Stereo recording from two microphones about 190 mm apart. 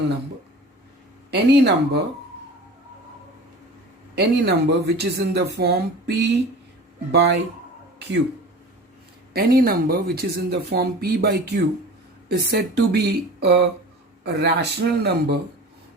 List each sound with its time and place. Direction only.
1.3 s speech: 60° right (ahead or behind)
4.1 s speech: 60° right (ahead or behind)
9.3 s speech: 55° right (ahead or behind)